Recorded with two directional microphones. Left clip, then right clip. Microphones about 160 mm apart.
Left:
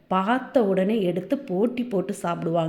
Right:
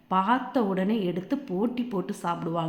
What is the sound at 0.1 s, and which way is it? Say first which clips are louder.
A woman's voice: left 2 dB; 20° left (ahead or behind).